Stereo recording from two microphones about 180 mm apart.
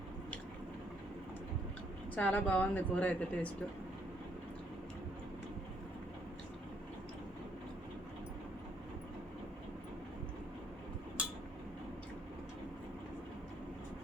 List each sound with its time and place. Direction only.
2.1 s speech: 10° left (ahead or behind)